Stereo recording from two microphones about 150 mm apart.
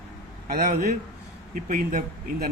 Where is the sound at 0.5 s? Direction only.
60° right (ahead or behind).